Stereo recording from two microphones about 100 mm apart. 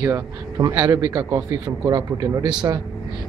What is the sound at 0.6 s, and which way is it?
A man's voice, 40° right (ahead or behind).